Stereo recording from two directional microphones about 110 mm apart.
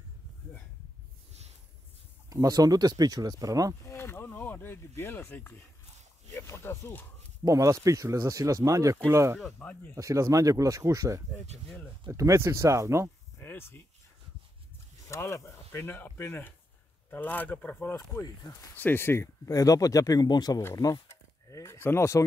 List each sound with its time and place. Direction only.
2.2 s speech: 35° right (ahead or behind)
3.8 s a sound: 25° left (ahead or behind)
6.3 s speech: 25° left (ahead or behind)
7.4 s speech: 30° right (ahead or behind)
9.6 s speech: 15° left (ahead or behind)
9.9 s speech: 30° right (ahead or behind)
13.4 s speech: 20° left (ahead or behind)
15.0 s speech: 25° left (ahead or behind)
17.9 s speech: 30° left (ahead or behind)
18.8 s speech: 20° left (ahead or behind); by 20.6 s 40° left (ahead or behind)
21.1 s speech: 25° left (ahead or behind)